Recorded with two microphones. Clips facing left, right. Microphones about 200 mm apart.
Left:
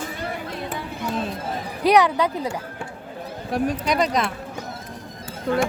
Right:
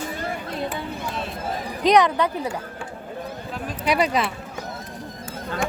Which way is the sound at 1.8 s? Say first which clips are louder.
Even; 10° left (ahead or behind).